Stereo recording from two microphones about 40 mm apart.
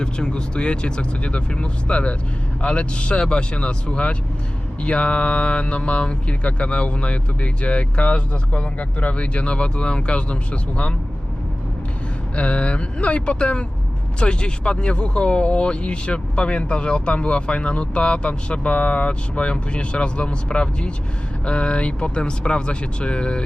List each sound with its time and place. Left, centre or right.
0.0 s speech: left
12.4 s speech: left